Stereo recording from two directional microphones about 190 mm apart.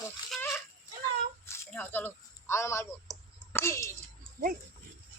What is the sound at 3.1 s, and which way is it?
Clicking, 10° left (ahead or behind).